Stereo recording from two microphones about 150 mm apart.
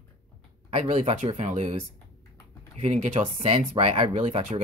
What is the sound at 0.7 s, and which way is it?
Speech, 40° right (ahead or behind).